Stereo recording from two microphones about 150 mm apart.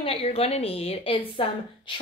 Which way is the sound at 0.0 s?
40° left (ahead or behind).